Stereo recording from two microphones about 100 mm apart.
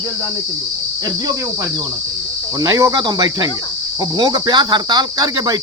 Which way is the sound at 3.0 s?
45° right (ahead or behind).